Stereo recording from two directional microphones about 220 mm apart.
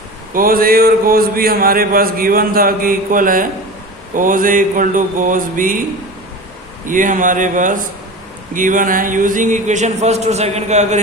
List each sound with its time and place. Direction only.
0.3 s a man's voice: 40° right (ahead or behind)
6.8 s a man's voice: 35° right (ahead or behind)